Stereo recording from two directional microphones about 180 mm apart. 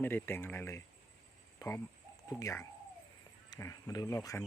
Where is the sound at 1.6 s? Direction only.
15° left (ahead or behind).